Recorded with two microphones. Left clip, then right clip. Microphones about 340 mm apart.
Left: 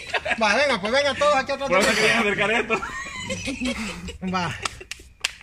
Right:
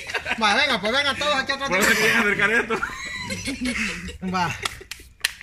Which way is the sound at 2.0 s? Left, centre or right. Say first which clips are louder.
Right 1 dB; left.